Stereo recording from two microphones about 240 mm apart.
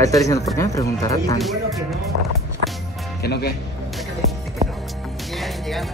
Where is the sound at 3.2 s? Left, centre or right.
Left.